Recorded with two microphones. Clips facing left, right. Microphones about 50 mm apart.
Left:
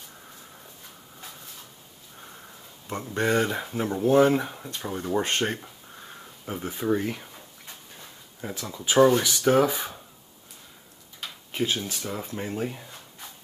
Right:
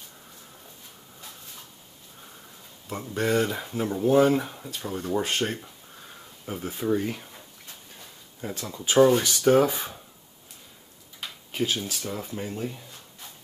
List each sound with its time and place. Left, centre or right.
2.9 s speech: centre
8.4 s speech: centre
11.5 s speech: centre
12.5 s speech: left